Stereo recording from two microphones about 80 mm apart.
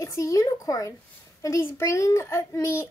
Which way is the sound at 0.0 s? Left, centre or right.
Left.